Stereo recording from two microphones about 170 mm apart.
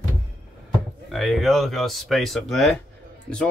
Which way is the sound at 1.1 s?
Centre (ahead or behind).